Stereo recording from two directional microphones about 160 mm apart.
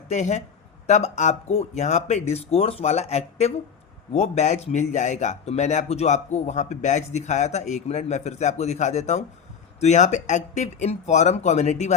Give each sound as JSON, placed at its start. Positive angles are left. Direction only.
{"t": 0.1, "sound": "speech", "side_deg": 45}